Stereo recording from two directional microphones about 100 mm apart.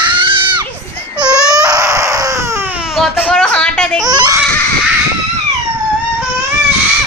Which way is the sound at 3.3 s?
10° left (ahead or behind).